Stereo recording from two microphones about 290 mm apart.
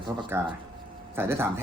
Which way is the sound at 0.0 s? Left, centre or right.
Centre.